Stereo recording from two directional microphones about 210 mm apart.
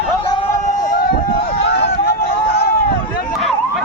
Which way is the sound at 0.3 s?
30° left (ahead or behind).